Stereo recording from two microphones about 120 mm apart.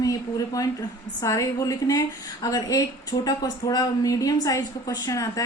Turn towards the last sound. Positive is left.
turn(degrees=30)  # may be behind; listen again after turning